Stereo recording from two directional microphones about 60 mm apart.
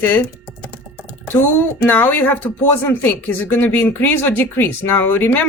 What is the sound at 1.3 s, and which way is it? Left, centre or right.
Speech, left.